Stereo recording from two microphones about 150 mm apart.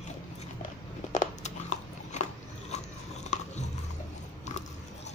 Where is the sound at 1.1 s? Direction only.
55° left (ahead or behind).